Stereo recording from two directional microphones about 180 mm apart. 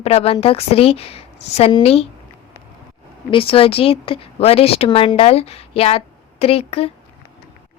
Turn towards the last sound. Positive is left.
turn(degrees=35)  # may be behind; listen again after turning